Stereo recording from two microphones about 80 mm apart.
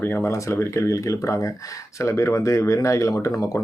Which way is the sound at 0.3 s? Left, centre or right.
Left.